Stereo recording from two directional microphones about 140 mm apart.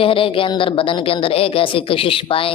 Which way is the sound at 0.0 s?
40° left (ahead or behind).